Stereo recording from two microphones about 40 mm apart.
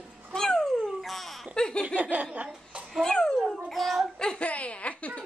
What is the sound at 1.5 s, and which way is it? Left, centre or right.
Laughter, centre.